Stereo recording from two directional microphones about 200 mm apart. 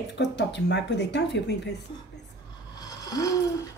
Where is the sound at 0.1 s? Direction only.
60° left (ahead or behind).